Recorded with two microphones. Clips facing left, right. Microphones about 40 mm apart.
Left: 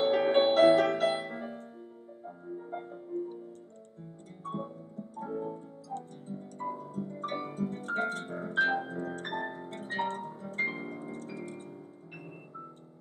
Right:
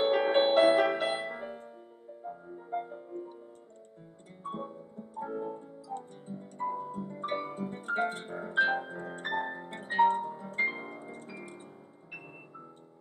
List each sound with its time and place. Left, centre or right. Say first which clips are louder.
0.0 s music: even; centre
4.4 s keyboard: even; centre
6.3 s music: right 3 dB; centre